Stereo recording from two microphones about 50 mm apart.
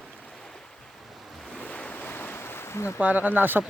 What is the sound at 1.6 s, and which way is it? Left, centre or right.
Ocean, left.